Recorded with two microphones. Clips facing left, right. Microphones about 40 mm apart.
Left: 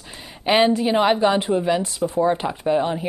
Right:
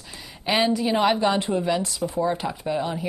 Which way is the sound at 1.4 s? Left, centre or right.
Left.